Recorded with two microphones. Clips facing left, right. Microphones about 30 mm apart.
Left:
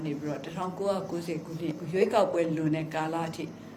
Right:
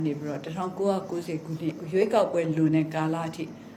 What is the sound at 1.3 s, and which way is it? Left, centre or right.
Speech, right.